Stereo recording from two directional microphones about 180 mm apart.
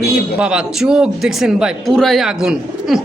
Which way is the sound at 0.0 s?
5° right (ahead or behind).